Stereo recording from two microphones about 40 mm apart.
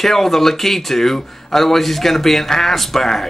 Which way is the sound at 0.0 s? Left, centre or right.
Centre.